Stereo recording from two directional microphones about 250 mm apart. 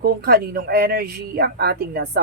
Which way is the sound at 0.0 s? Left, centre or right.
Right.